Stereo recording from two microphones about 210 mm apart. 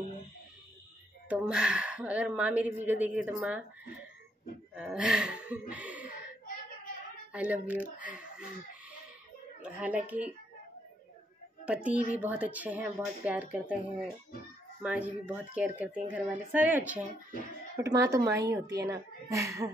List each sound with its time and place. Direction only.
1.3 s speech: 5° right (ahead or behind)
4.7 s speech: 5° right (ahead or behind)
7.3 s speech: 5° right (ahead or behind)
8.2 s a sound: 5° right (ahead or behind)
9.6 s a woman's voice: 5° right (ahead or behind)
11.6 s a woman's voice: 5° right (ahead or behind)
14.8 s speech: 5° right (ahead or behind)